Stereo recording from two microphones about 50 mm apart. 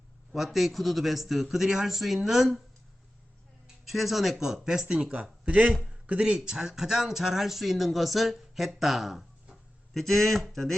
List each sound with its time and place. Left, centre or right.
0.3 s speech: centre
3.8 s speech: centre
5.2 s speech: right; by 10.8 s centre